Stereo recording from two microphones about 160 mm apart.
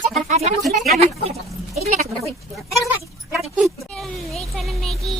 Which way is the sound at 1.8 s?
60° right (ahead or behind).